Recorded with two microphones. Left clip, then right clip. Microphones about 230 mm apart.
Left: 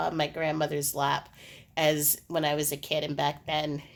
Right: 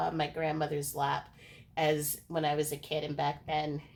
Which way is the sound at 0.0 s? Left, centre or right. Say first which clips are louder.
Left 3 dB; left.